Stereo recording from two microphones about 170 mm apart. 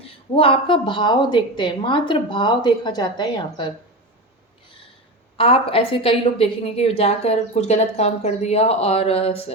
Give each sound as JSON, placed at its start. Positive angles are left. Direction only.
{"t": 0.3, "sound": "a woman's voice", "side_deg": 30}
{"t": 5.4, "sound": "a woman's voice", "side_deg": 30}